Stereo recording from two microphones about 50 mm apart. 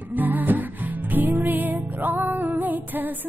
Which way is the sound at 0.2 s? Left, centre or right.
Right.